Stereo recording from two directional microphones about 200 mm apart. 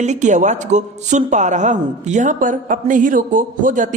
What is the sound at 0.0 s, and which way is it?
Speech, 35° right (ahead or behind).